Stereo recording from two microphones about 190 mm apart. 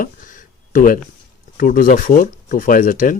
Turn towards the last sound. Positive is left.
turn(degrees=45)  # may be behind; listen again after turning